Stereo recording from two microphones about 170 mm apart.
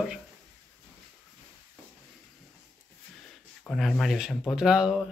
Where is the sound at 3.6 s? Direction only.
5° left (ahead or behind).